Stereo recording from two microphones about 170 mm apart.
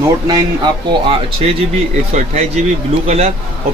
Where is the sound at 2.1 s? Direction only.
40° right (ahead or behind).